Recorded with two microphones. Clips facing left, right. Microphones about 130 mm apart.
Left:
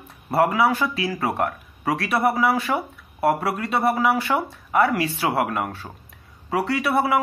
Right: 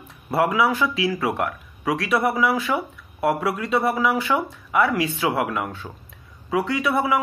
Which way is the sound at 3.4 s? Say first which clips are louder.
Even; 60° left (ahead or behind).